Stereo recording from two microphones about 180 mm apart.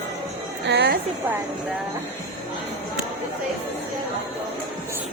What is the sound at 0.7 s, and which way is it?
Speech, 75° right (ahead or behind).